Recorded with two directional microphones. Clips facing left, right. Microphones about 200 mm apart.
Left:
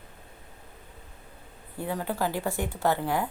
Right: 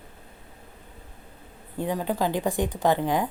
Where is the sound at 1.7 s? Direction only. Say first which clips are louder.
Right 4 dB; 20° right (ahead or behind).